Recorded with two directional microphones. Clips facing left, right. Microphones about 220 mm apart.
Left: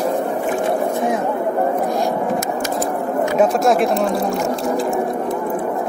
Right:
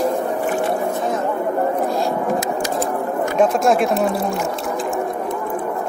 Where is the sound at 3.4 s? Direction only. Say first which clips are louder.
Even; centre (ahead or behind).